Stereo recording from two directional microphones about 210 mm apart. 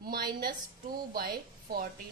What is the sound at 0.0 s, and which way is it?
A woman's voice, 45° right (ahead or behind).